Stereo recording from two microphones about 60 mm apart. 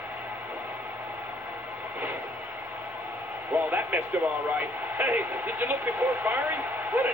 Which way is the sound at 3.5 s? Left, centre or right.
Right.